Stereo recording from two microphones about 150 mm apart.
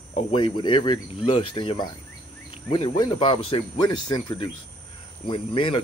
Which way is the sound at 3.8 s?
30° left (ahead or behind).